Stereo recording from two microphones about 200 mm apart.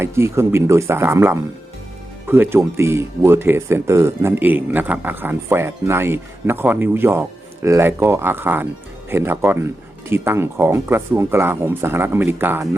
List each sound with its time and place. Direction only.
0.0 s speech: 15° right (ahead or behind)